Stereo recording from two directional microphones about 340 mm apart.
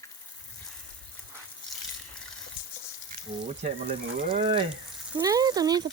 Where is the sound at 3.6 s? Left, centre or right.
Centre.